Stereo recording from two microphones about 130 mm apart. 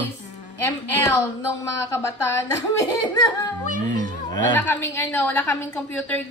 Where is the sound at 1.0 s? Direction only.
20° left (ahead or behind).